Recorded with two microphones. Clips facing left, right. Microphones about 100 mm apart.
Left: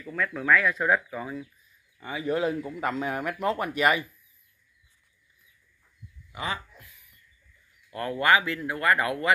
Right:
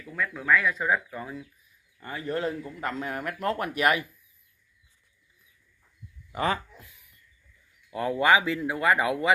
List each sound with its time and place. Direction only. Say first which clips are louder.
0.0 s speech: left 2 dB; centre (ahead or behind)
6.3 s speech: right 6 dB; 45° right (ahead or behind)
7.9 s speech: right 1 dB; 15° right (ahead or behind)